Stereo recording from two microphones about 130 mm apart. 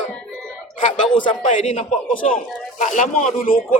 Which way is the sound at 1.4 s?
70° left (ahead or behind).